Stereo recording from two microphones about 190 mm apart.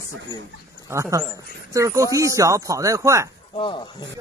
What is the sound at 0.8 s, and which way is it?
Chopping, 15° right (ahead or behind).